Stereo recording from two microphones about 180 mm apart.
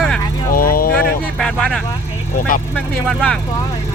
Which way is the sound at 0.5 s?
55° left (ahead or behind).